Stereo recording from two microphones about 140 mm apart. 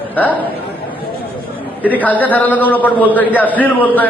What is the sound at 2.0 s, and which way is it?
A man's voice, 10° left (ahead or behind).